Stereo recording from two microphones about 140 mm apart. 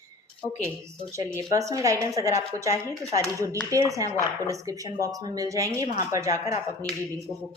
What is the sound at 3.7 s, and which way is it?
Speech, 25° right (ahead or behind).